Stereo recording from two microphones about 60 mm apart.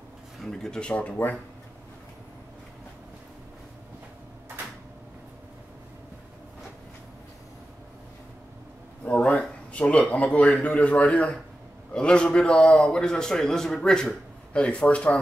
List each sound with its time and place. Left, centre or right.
0.4 s a man's voice: centre
9.0 s a sound: left
9.7 s a man's voice: centre